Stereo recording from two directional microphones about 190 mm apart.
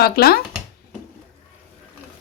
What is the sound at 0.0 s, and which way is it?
Speech, 55° left (ahead or behind).